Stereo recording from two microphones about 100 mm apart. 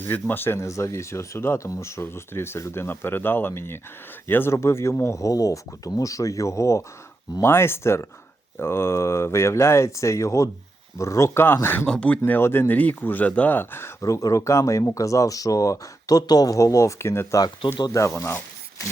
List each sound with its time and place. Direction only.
0.0 s speech: 20° left (ahead or behind)
11.9 s speech: 10° left (ahead or behind); by 18.9 s 30° left (ahead or behind)